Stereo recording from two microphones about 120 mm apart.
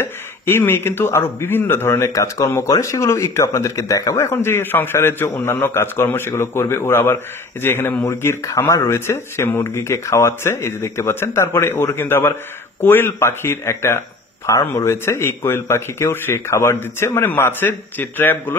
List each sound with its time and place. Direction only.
0.0 s a man's voice: 20° left (ahead or behind)